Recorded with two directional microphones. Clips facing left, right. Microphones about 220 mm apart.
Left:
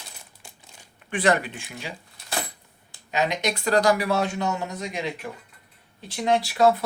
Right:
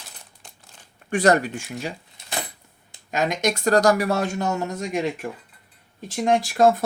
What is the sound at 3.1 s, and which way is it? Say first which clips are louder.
Speech: right 2 dB; 45° right (ahead or behind).